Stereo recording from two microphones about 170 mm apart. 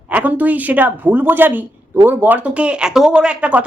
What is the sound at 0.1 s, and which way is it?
Speech, 10° right (ahead or behind).